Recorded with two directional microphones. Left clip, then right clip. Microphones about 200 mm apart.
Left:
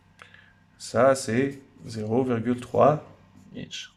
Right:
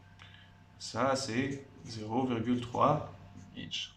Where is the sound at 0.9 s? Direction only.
50° left (ahead or behind).